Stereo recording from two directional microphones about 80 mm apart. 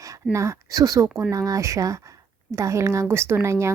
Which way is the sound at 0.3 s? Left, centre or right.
Right.